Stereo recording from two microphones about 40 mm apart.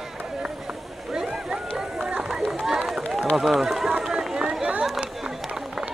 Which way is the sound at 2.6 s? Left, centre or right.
Centre.